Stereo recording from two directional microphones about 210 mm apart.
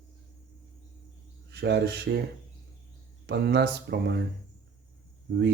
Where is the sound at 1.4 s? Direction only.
50° right (ahead or behind).